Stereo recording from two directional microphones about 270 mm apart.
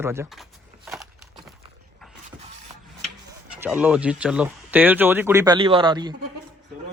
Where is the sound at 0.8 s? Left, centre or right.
Centre.